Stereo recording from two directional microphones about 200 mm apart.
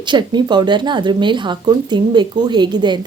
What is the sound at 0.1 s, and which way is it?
Speech, 20° right (ahead or behind).